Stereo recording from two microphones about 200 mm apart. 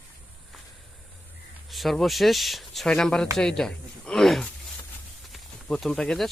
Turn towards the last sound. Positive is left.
turn(degrees=0)  # may be behind; listen again after turning